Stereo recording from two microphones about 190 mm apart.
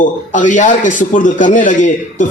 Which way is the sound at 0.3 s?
40° left (ahead or behind).